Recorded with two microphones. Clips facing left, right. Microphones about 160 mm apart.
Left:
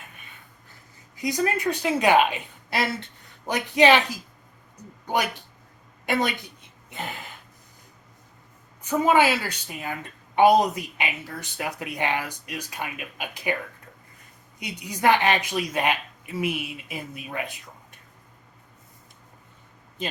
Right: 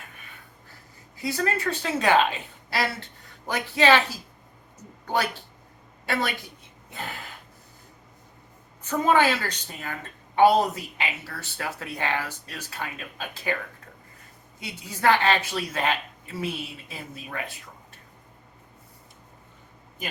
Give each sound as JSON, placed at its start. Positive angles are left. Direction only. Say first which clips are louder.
{"t": 1.1, "sound": "a woman's voice", "louder": "left 2 dB", "side_deg": 15}
{"t": 6.9, "sound": "gasp", "louder": "left 2 dB", "side_deg": 20}
{"t": 8.8, "sound": "a woman's voice", "louder": "left 1 dB", "side_deg": 10}
{"t": 14.6, "sound": "a woman's voice", "louder": "left 1 dB", "side_deg": 15}